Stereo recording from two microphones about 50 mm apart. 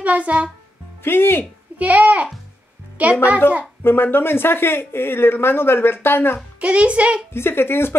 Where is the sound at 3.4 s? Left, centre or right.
Left.